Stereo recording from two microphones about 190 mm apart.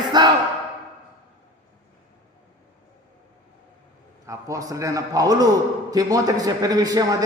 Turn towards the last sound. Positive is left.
turn(degrees=-20)  # may be behind; listen again after turning